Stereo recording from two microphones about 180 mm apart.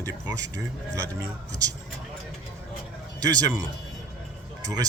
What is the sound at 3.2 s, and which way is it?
Speech, 20° right (ahead or behind).